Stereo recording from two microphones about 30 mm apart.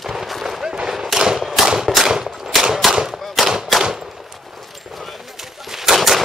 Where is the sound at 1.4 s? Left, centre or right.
Centre.